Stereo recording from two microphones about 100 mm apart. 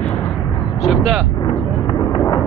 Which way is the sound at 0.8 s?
Centre (ahead or behind).